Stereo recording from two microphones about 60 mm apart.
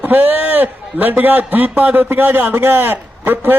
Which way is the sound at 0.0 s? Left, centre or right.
Right.